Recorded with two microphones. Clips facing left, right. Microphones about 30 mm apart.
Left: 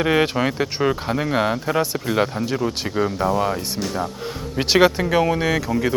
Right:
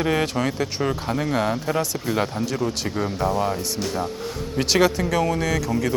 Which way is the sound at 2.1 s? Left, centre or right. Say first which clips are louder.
Left 3 dB; centre.